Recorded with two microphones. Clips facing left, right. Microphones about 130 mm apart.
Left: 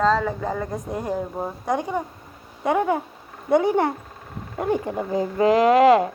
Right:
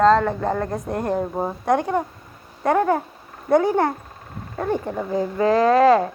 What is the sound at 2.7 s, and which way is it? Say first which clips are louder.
Speech: right 2 dB; 15° left (ahead or behind).